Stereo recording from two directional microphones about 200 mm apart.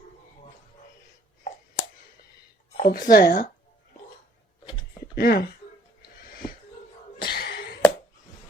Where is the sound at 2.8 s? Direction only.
45° left (ahead or behind).